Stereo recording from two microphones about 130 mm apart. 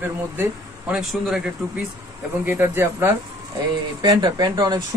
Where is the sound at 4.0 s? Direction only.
30° right (ahead or behind).